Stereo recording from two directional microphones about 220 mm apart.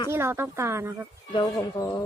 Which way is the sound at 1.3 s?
15° left (ahead or behind).